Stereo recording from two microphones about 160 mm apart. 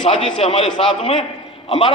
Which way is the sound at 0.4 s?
40° left (ahead or behind).